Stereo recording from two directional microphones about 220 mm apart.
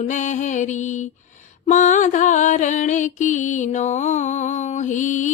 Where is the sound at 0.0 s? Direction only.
35° left (ahead or behind).